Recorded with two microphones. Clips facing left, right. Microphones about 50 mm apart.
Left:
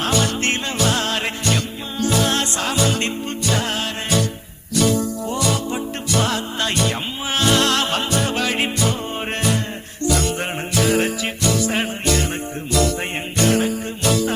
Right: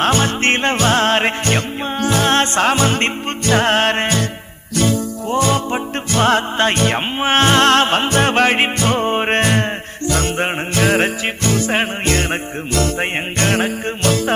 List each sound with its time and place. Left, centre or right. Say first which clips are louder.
0.0 s music: right 4 dB; right